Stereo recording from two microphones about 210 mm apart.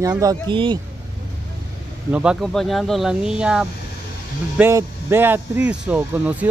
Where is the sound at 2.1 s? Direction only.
5° right (ahead or behind).